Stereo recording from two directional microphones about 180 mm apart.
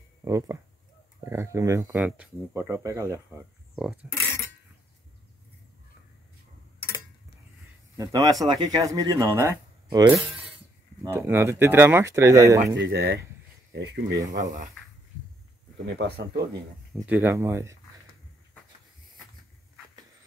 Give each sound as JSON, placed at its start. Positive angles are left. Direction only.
{"t": 0.2, "sound": "speech", "side_deg": -15}
{"t": 8.0, "sound": "speech", "side_deg": -20}
{"t": 12.6, "sound": "speech", "side_deg": -75}
{"t": 14.4, "sound": "speech", "side_deg": -45}
{"t": 16.0, "sound": "speech", "side_deg": -65}
{"t": 16.9, "sound": "speech", "side_deg": -10}